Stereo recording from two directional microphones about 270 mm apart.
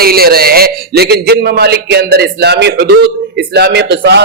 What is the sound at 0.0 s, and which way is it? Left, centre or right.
A man's voice, right.